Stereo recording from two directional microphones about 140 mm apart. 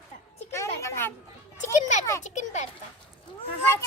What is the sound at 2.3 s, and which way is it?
Speech, 55° left (ahead or behind).